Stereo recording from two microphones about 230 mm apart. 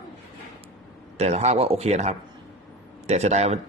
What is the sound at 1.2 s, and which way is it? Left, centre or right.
A man's voice, right.